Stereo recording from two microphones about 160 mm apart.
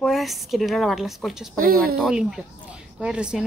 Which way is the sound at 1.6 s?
65° right (ahead or behind).